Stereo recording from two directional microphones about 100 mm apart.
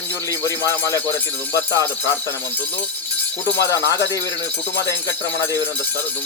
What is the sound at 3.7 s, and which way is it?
Speech, 35° left (ahead or behind).